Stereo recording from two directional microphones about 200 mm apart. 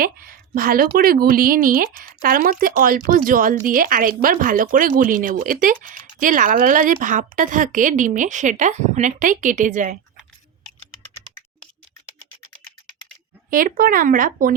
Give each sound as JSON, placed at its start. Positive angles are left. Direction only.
{"t": 0.0, "sound": "a woman's voice", "side_deg": -45}
{"t": 13.5, "sound": "a woman's voice", "side_deg": -45}